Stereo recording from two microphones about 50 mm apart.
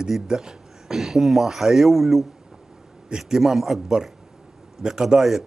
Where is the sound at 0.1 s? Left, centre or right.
Centre.